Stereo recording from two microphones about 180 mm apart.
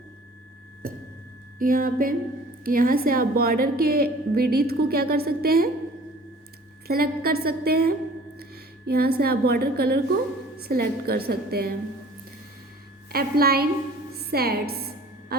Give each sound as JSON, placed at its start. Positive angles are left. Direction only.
{"t": 0.8, "sound": "music", "side_deg": -50}
{"t": 1.5, "sound": "a sound", "side_deg": -50}
{"t": 2.6, "sound": "a woman's voice", "side_deg": -55}
{"t": 6.8, "sound": "a woman's voice", "side_deg": -55}
{"t": 13.1, "sound": "a woman's voice", "side_deg": -60}
{"t": 14.2, "sound": "a sound", "side_deg": -60}